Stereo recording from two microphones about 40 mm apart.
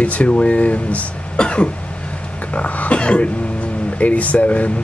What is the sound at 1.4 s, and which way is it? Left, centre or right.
Cough, left.